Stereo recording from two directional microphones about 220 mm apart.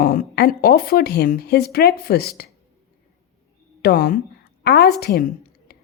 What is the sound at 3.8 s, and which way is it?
A woman's voice, 40° left (ahead or behind).